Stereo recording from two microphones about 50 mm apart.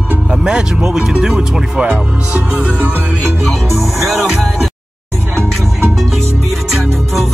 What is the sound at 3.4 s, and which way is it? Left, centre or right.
Speech, centre.